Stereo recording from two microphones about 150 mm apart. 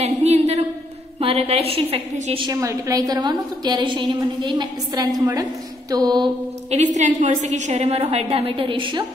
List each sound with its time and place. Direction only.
0.0 s a sound: 45° right (ahead or behind)
1.2 s a woman's voice: 40° right (ahead or behind)
2.4 s a woman's voice: 20° right (ahead or behind)
6.7 s a woman's voice: 50° right (ahead or behind); by 9.0 s 35° right (ahead or behind)